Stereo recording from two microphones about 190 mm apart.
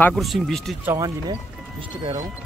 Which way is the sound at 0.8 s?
15° right (ahead or behind).